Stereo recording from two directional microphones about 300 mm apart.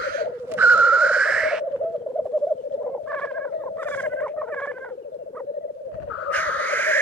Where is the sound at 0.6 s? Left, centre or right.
Centre.